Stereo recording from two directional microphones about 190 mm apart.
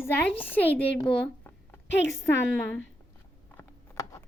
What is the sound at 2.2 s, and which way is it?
Speech, 10° left (ahead or behind).